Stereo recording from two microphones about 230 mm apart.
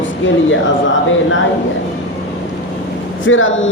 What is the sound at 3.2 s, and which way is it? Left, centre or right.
Speech, left.